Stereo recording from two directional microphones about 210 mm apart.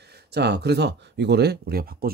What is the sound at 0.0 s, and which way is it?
Speech, 50° right (ahead or behind).